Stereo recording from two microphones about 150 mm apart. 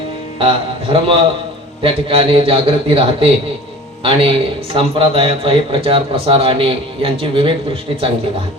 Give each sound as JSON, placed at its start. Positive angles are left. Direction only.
{"t": 0.3, "sound": "a man's voice", "side_deg": -35}